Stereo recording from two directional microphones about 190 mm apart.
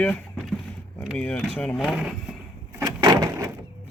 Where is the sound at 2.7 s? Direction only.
20° right (ahead or behind).